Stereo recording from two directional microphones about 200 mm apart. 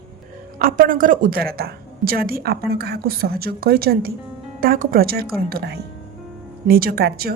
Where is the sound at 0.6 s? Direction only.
45° right (ahead or behind).